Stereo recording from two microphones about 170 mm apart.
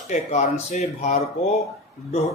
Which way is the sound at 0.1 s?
45° left (ahead or behind).